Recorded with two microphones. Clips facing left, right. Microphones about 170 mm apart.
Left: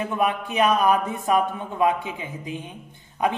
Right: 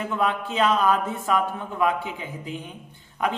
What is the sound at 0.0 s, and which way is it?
A man's voice, 15° left (ahead or behind).